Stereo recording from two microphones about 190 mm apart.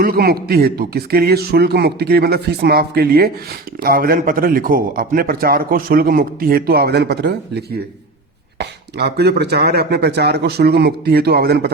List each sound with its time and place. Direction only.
0.0 s a man's voice: 50° right (ahead or behind)
8.5 s speech: 60° right (ahead or behind)